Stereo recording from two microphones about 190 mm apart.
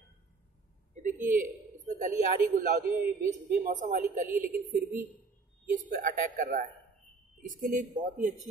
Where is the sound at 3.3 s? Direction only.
40° right (ahead or behind).